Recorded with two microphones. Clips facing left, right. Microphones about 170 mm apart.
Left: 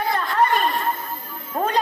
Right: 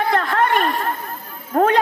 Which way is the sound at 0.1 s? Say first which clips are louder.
Even; 70° right (ahead or behind).